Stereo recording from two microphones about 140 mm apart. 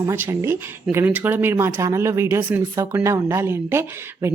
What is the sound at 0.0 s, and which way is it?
Speech, 20° right (ahead or behind).